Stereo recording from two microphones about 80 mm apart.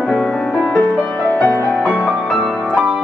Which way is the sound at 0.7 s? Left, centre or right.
Centre.